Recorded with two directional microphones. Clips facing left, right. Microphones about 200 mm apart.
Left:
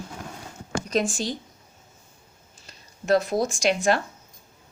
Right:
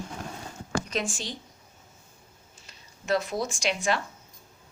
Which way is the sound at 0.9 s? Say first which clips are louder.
Left 7 dB; 40° left (ahead or behind).